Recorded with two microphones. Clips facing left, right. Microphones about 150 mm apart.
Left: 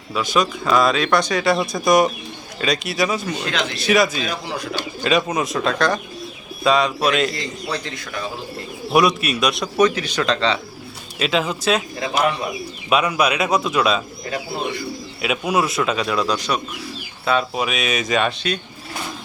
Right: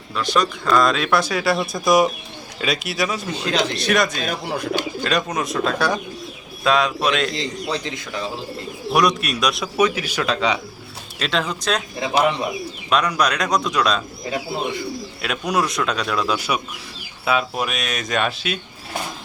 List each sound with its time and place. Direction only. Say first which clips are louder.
0.1 s speech: left 1 dB; 5° left (ahead or behind)
3.5 s speech: right 6 dB; 35° right (ahead or behind)
3.8 s speech: left 2 dB; centre (ahead or behind)
4.2 s speech: right 1 dB; 50° right (ahead or behind)
5.0 s speech: left 6 dB; centre (ahead or behind)
7.3 s a man's voice: right 2 dB; 20° right (ahead or behind)
8.9 s speech: left 2 dB; centre (ahead or behind)
11.2 s speech: left 3 dB; 5° left (ahead or behind)
12.9 s speech: left 2 dB; 5° left (ahead or behind)
15.2 s speech: left 2 dB; 5° left (ahead or behind)